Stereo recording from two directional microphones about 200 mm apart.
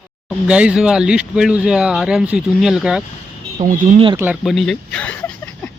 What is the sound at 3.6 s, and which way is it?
Speech, 40° right (ahead or behind).